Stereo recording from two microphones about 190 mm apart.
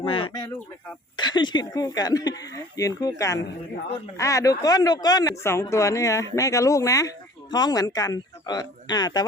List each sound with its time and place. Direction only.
0.0 s speech: 30° left (ahead or behind)